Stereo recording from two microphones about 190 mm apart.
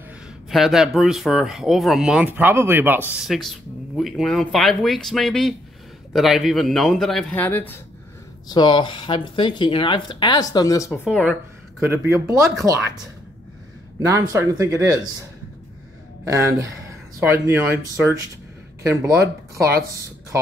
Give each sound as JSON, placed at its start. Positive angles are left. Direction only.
{"t": 0.5, "sound": "speech", "side_deg": 0}
{"t": 8.5, "sound": "speech", "side_deg": 25}
{"t": 10.9, "sound": "speech", "side_deg": 0}
{"t": 14.0, "sound": "speech", "side_deg": -15}
{"t": 16.3, "sound": "speech", "side_deg": -15}